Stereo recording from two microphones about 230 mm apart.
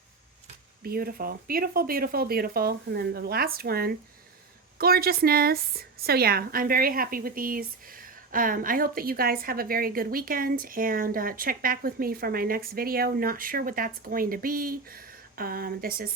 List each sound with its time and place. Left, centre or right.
0.8 s a woman's voice: right